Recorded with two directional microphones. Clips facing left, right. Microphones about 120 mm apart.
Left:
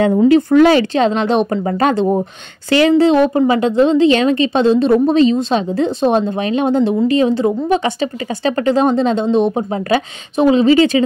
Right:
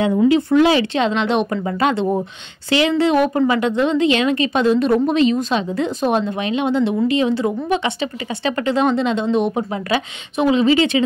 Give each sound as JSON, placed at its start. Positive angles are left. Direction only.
{"t": 0.3, "sound": "a woman's voice", "side_deg": 45}
{"t": 3.1, "sound": "a woman's voice", "side_deg": 30}